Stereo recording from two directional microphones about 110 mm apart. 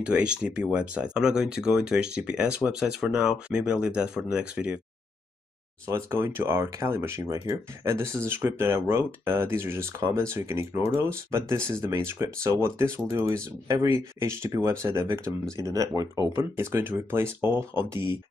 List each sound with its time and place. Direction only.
0.0 s speech: 10° right (ahead or behind)
5.9 s speech: 25° right (ahead or behind)
16.5 s speech: 20° right (ahead or behind)